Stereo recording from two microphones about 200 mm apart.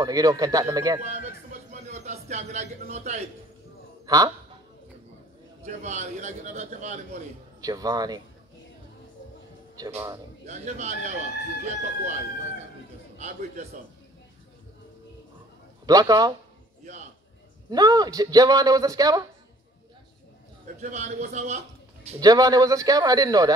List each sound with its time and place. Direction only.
0.0 s speech: 20° right (ahead or behind)
1.7 s a man's voice: 35° right (ahead or behind)
4.0 s goose: 20° right (ahead or behind)
5.6 s a man's voice: 35° right (ahead or behind)
7.6 s a man's voice: 20° right (ahead or behind)
9.8 s speech: 15° right (ahead or behind)
10.4 s a man's voice: 35° right (ahead or behind)
15.8 s a man's voice: 20° right (ahead or behind)
17.6 s a man's voice: 20° right (ahead or behind)
20.8 s a man's voice: 35° right (ahead or behind)
22.2 s a man's voice: 20° right (ahead or behind)